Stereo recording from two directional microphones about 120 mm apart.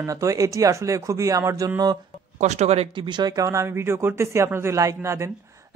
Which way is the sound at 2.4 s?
70° right (ahead or behind).